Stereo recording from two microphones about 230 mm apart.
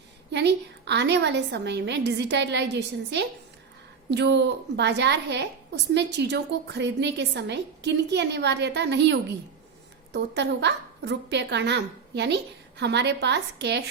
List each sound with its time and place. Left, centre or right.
0.3 s a woman's voice: right